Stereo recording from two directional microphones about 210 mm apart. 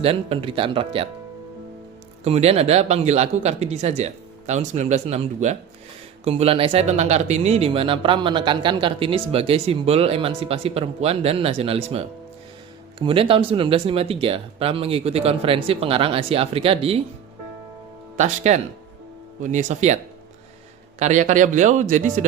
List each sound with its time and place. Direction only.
0.0 s speech: 25° right (ahead or behind)
2.2 s speech: 30° right (ahead or behind)
18.2 s speech: 35° right (ahead or behind)
21.0 s speech: 35° right (ahead or behind)